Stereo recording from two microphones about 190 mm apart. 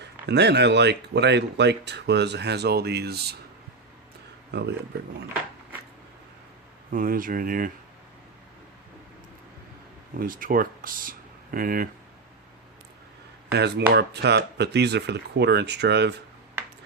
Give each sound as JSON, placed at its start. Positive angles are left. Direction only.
{"t": 0.0, "sound": "speech", "side_deg": -60}
{"t": 4.5, "sound": "speech", "side_deg": -65}
{"t": 6.9, "sound": "speech", "side_deg": -45}
{"t": 10.2, "sound": "speech", "side_deg": -45}
{"t": 13.5, "sound": "speech", "side_deg": -60}